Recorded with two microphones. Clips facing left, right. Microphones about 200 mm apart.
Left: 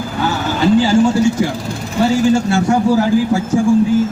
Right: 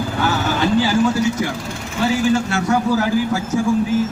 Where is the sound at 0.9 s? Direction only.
30° left (ahead or behind).